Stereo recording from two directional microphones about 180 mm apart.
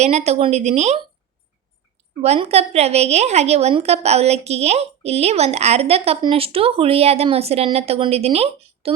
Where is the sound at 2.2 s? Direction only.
35° right (ahead or behind).